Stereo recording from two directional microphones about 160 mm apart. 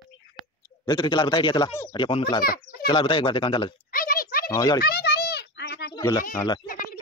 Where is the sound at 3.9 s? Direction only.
65° left (ahead or behind).